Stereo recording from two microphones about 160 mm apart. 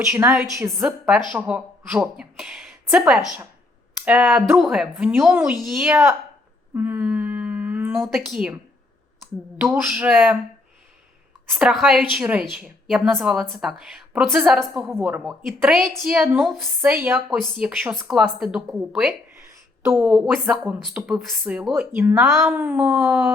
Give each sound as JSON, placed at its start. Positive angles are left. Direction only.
{"t": 0.1, "sound": "speech", "side_deg": -15}
{"t": 0.8, "sound": "a woman's voice", "side_deg": -5}
{"t": 4.0, "sound": "speech", "side_deg": -5}
{"t": 5.3, "sound": "speech", "side_deg": -15}
{"t": 5.6, "sound": "speech", "side_deg": -5}
{"t": 6.7, "sound": "a sound", "side_deg": -10}
{"t": 8.0, "sound": "speech", "side_deg": 0}
{"t": 9.6, "sound": "speech", "side_deg": -10}
{"t": 11.5, "sound": "speech", "side_deg": 0}
{"t": 16.8, "sound": "speech", "side_deg": -10}